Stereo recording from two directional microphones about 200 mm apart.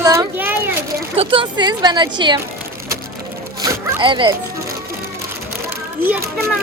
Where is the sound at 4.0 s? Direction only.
25° right (ahead or behind).